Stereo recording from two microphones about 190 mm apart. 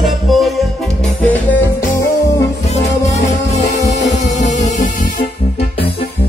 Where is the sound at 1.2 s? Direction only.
15° left (ahead or behind).